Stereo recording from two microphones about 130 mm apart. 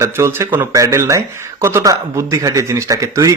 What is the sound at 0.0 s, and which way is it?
Speech, 20° right (ahead or behind).